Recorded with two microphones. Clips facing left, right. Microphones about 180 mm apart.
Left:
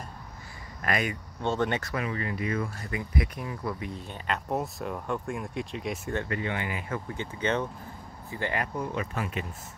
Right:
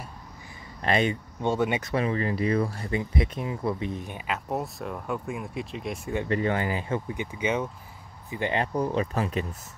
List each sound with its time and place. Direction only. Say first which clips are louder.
0.8 s speech: right 5 dB; 25° right (ahead or behind)
1.4 s speech: right 2 dB; 10° right (ahead or behind)
1.9 s speech: right 5 dB; 30° right (ahead or behind)
4.3 s speech: left 1 dB; centre (ahead or behind)
6.2 s speech: right 6 dB; 35° right (ahead or behind)
7.1 s speech: right 1 dB; 10° right (ahead or behind)
8.7 s speech: right 6 dB; 30° right (ahead or behind)